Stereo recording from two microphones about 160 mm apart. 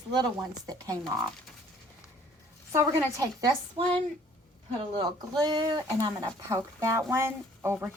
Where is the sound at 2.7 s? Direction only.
20° right (ahead or behind).